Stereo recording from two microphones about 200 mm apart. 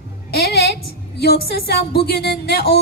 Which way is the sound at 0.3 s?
50° left (ahead or behind).